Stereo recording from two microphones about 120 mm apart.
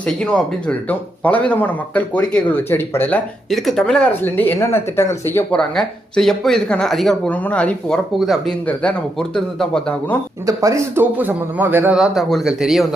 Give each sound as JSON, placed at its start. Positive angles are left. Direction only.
{"t": 0.2, "sound": "speech", "side_deg": 5}
{"t": 3.5, "sound": "speech", "side_deg": 0}
{"t": 4.2, "sound": "speech", "side_deg": 15}
{"t": 5.5, "sound": "speech", "side_deg": 5}
{"t": 8.2, "sound": "speech", "side_deg": 0}
{"t": 8.6, "sound": "speech", "side_deg": 10}
{"t": 10.4, "sound": "a man's voice", "side_deg": -25}
{"t": 11.9, "sound": "speech", "side_deg": -5}